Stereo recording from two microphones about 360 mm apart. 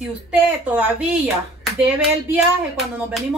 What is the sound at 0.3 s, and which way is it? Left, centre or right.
Speech, centre.